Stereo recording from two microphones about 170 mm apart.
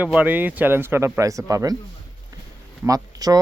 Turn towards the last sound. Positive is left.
turn(degrees=-20)  # may be behind; listen again after turning